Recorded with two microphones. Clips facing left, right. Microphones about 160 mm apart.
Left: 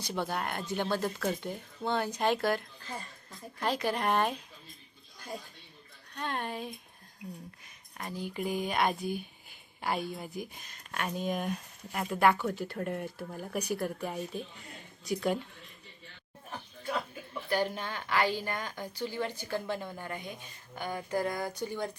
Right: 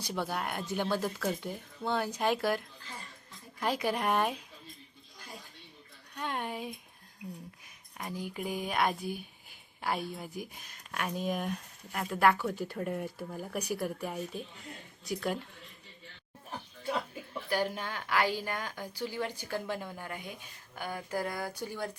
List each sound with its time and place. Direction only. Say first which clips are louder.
0.0 s a woman's voice: left 1 dB; 5° right (ahead or behind)
6.1 s a woman's voice: even; 10° right (ahead or behind)
7.9 s speech: left 1 dB; 10° right (ahead or behind)
17.5 s a woman's voice: left 1 dB; 10° right (ahead or behind)